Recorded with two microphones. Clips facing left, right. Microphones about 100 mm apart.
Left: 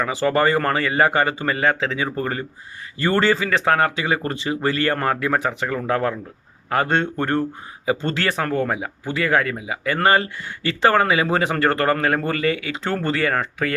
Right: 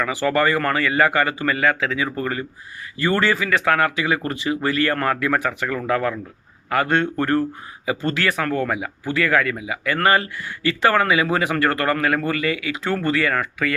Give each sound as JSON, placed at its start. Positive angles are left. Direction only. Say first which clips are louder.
{"t": 0.0, "sound": "speech", "louder": "left 1 dB", "side_deg": 25}